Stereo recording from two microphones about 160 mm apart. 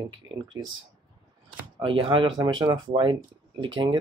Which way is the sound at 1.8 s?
35° right (ahead or behind).